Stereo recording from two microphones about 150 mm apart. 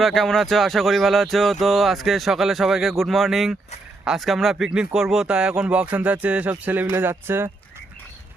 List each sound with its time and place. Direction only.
0.0 s speech: 5° left (ahead or behind); by 7.5 s 15° right (ahead or behind)